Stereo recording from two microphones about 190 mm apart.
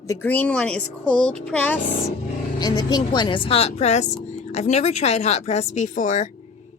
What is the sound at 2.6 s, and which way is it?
A woman's voice, 20° left (ahead or behind).